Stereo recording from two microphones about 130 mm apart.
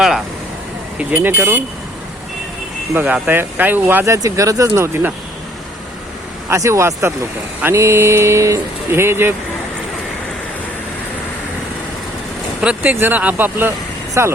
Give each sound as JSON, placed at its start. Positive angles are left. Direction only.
{"t": 0.9, "sound": "speech", "side_deg": -15}
{"t": 2.9, "sound": "speech", "side_deg": -15}
{"t": 6.5, "sound": "speech", "side_deg": -20}
{"t": 12.6, "sound": "speech", "side_deg": -10}